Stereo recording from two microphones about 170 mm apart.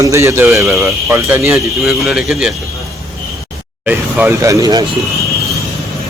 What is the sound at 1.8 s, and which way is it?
Speech, centre (ahead or behind).